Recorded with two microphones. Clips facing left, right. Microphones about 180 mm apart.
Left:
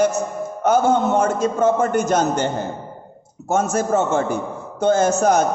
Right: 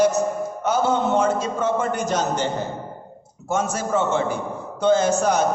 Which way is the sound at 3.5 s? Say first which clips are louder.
Left 4 dB; 45° left (ahead or behind).